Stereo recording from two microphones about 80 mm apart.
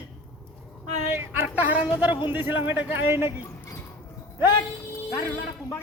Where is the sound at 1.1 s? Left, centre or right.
Right.